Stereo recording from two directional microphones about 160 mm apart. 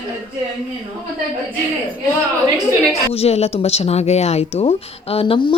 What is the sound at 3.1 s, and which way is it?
Speech, 40° left (ahead or behind).